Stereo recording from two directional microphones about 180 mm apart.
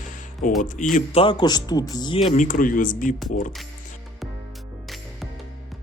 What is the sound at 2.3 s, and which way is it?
Speech, 45° left (ahead or behind).